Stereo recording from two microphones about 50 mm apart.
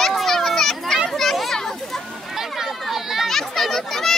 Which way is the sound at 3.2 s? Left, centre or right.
Centre.